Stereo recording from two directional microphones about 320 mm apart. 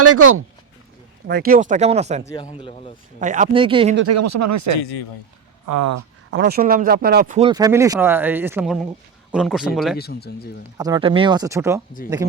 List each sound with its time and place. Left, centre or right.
0.0 s speech: right
1.3 s speech: right
2.2 s speech: centre
3.2 s speech: right
3.9 s speech: right
6.3 s a man's voice: right; by 10.0 s centre
10.0 s speech: left
10.8 s speech: centre